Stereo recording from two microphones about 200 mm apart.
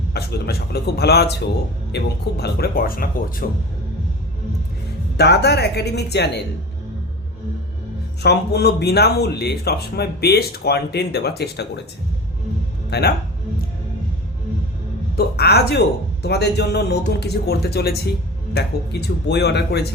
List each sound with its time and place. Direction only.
0.1 s speech: 50° left (ahead or behind)
5.1 s a man's voice: 55° left (ahead or behind)
8.2 s speech: 55° left (ahead or behind)
12.9 s speech: 50° left (ahead or behind)
15.1 s a man's voice: 50° left (ahead or behind)